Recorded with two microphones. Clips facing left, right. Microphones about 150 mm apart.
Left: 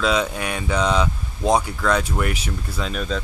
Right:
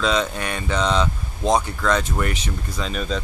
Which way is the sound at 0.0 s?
5° left (ahead or behind).